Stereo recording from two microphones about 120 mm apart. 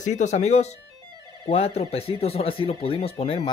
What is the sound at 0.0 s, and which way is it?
Speech, 80° left.